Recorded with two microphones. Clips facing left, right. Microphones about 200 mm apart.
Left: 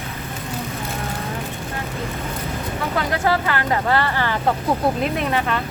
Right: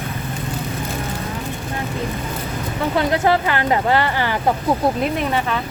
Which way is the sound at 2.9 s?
20° right (ahead or behind).